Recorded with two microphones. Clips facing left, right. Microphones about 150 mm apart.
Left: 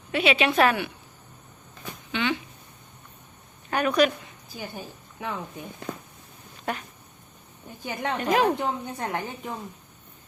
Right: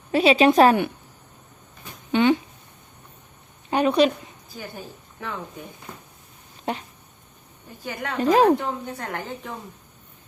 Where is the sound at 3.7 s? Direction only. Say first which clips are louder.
Right 3 dB; 25° right (ahead or behind).